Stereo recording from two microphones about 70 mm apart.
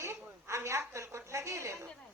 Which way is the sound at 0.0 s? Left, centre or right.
Right.